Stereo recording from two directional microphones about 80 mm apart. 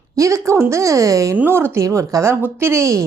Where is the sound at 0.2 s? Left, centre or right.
Right.